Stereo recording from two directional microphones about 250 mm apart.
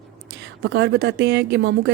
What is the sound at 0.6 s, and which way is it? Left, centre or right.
Speech, right.